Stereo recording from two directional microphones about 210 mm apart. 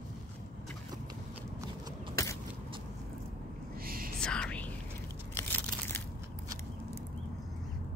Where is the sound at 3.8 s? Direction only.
45° right (ahead or behind).